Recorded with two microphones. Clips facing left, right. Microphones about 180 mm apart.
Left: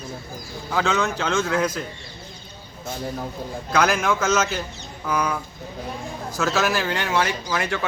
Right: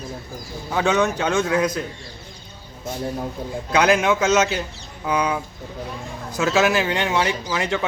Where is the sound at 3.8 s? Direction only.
15° right (ahead or behind).